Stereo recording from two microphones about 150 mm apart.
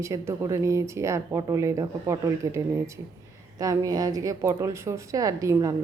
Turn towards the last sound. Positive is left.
turn(degrees=-20)  # may be behind; listen again after turning